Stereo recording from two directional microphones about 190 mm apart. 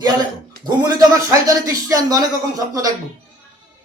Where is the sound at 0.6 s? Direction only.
15° right (ahead or behind).